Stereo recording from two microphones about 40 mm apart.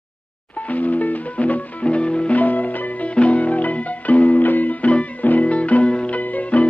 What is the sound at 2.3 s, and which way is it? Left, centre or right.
Music, left.